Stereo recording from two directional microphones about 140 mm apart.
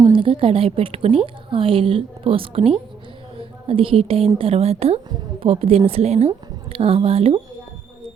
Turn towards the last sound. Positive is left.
turn(degrees=-45)  # may be behind; listen again after turning